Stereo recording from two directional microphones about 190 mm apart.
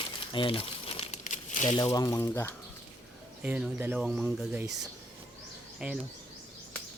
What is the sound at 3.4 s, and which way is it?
Speech, 10° right (ahead or behind).